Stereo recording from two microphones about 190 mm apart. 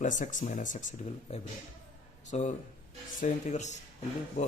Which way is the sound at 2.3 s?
35° left (ahead or behind).